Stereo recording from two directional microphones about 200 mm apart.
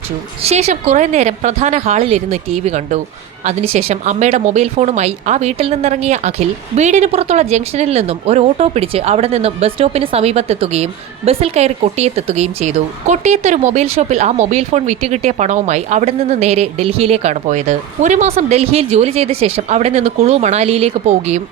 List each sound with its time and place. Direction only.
0.4 s speech: 35° right (ahead or behind)